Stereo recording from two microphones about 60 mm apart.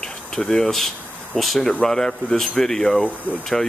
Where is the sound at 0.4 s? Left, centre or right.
Centre.